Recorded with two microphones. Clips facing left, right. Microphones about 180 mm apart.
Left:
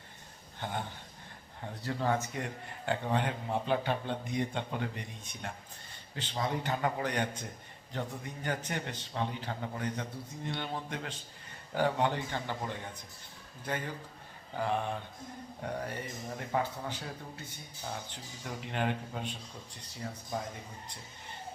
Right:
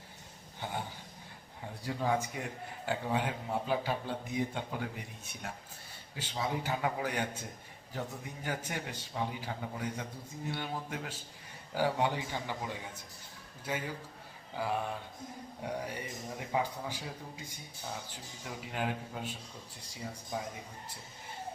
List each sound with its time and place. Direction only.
0.6 s a man's voice: 5° right (ahead or behind)